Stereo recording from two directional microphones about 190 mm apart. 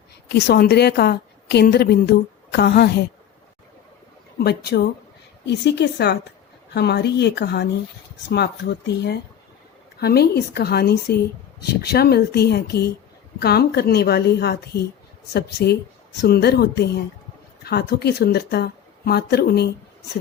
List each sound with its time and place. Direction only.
0.3 s a woman's voice: 60° left (ahead or behind)
4.4 s a woman's voice: 55° left (ahead or behind)
10.0 s a woman's voice: 55° left (ahead or behind)